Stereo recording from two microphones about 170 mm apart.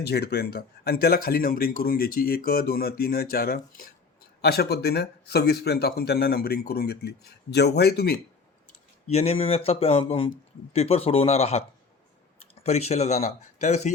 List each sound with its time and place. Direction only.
0.0 s speech: 70° left (ahead or behind)
9.1 s speech: 35° left (ahead or behind)